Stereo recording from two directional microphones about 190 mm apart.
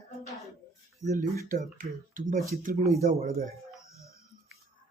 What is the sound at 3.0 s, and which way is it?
Speech, 55° right (ahead or behind).